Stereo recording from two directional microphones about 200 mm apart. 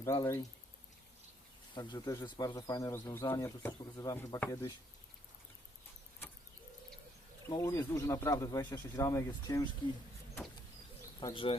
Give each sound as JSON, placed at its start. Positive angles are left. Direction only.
{"t": 0.0, "sound": "speech", "side_deg": 15}
{"t": 1.7, "sound": "speech", "side_deg": 20}
{"t": 7.4, "sound": "speech", "side_deg": 15}
{"t": 11.2, "sound": "speech", "side_deg": 20}